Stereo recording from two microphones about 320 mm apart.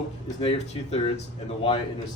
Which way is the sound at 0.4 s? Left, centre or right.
Centre.